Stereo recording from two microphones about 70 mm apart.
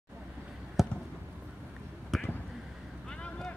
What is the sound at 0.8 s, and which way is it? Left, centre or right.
Basketball bounce, centre.